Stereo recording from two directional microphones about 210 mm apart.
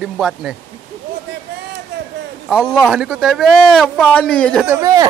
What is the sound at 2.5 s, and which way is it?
Speech, centre (ahead or behind).